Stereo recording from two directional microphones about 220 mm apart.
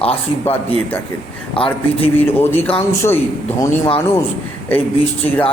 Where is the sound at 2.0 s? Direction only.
10° left (ahead or behind).